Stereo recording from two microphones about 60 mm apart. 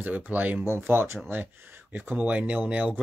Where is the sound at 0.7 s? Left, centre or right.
Right.